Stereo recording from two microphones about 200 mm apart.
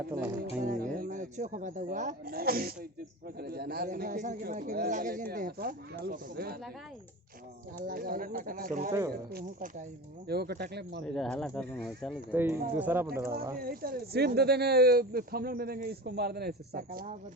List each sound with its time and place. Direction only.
0.6 s a sound: 40° right (ahead or behind)
0.9 s speech: 45° right (ahead or behind)
7.9 s speech: 45° right (ahead or behind)
8.9 s speech: 15° right (ahead or behind)
9.3 s speech: 45° right (ahead or behind)
11.0 s speech: 5° left (ahead or behind)
12.3 s speech: 10° right (ahead or behind)
13.6 s speech: 50° right (ahead or behind)